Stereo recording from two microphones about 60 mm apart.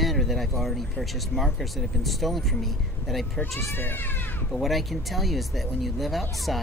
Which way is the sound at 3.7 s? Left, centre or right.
Left.